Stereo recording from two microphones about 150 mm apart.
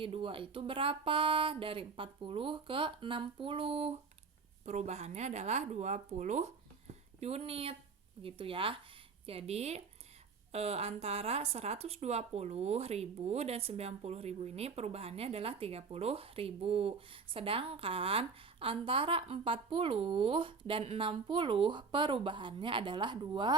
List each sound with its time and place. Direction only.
0.0 s a woman's voice: 35° right (ahead or behind)